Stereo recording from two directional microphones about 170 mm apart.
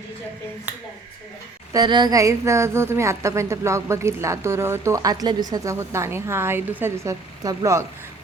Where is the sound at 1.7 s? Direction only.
25° right (ahead or behind).